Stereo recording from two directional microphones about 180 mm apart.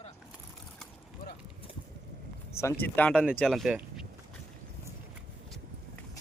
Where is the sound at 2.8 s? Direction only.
10° left (ahead or behind).